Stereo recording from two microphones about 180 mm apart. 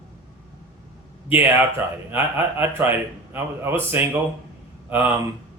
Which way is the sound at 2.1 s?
10° right (ahead or behind).